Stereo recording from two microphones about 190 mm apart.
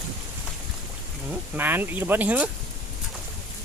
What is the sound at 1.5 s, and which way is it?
Speech, 10° right (ahead or behind).